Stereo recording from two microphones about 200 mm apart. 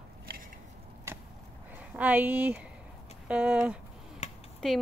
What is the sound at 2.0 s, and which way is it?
Speech, 10° right (ahead or behind).